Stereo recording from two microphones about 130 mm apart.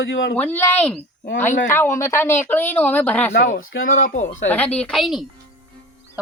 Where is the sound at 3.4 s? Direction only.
90° left; by 4.4 s 70° left (ahead or behind).